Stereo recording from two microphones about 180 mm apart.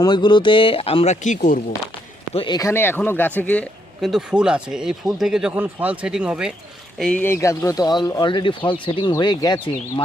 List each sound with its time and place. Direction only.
0.0 s speech: 25° left (ahead or behind); by 1.6 s 45° left (ahead or behind)
2.3 s speech: 25° left (ahead or behind); by 6.5 s 5° right (ahead or behind)
7.0 s speech: 10° left (ahead or behind)